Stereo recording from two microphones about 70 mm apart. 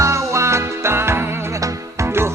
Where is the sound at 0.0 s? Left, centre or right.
Right.